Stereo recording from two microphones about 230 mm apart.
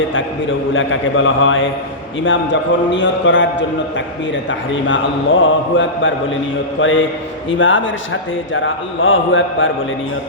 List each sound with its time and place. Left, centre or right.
0.7 s a man's voice: left
5.4 s a man's voice: left